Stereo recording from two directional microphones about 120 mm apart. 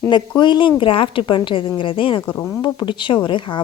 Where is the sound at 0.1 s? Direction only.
40° left (ahead or behind).